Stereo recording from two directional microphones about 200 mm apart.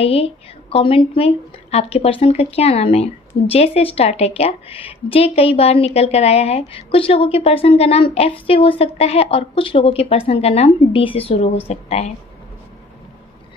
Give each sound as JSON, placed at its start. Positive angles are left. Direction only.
{"t": 0.0, "sound": "a woman's voice", "side_deg": 30}